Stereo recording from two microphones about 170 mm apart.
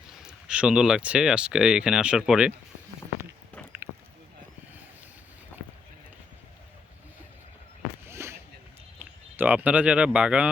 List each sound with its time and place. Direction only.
0.2 s speech: 5° right (ahead or behind)
8.0 s a sound: 15° right (ahead or behind)
9.0 s speech: 10° right (ahead or behind)